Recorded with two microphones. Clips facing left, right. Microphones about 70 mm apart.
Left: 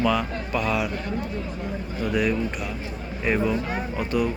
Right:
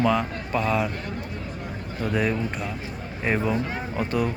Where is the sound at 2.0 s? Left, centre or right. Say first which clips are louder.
Left 1 dB; right.